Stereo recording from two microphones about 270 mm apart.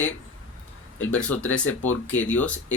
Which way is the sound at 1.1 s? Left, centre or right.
Centre.